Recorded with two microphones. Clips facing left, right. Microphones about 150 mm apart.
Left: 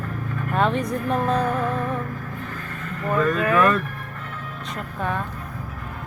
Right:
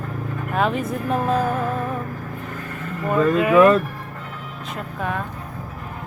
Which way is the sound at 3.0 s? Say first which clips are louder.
Right 3 dB; 20° right (ahead or behind).